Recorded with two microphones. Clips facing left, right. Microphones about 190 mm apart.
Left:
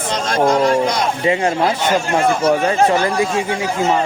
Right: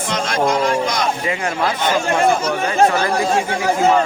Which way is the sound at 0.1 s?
35° left (ahead or behind).